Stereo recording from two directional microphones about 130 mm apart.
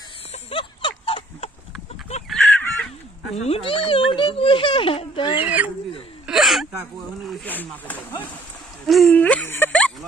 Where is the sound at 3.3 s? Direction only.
50° left (ahead or behind).